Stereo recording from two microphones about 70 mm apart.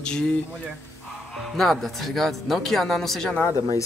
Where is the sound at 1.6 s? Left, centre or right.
Centre.